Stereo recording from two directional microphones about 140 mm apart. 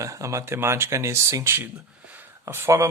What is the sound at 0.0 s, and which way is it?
Speech, 25° right (ahead or behind).